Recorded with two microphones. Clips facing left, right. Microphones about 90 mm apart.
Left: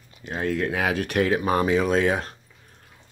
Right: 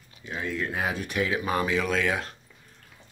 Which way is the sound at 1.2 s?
40° left (ahead or behind).